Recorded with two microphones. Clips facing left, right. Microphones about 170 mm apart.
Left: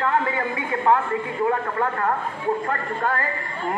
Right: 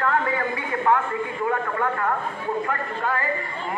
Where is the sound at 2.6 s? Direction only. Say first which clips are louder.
Left 2 dB; 45° left (ahead or behind).